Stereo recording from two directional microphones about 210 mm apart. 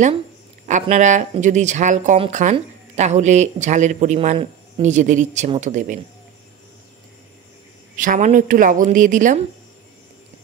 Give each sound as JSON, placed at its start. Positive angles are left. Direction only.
{"t": 0.7, "sound": "speech", "side_deg": -35}
{"t": 7.9, "sound": "speech", "side_deg": -40}